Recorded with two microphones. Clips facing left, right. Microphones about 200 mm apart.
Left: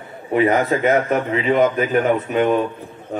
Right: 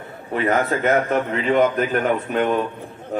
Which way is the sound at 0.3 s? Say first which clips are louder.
Left 4 dB; 10° left (ahead or behind).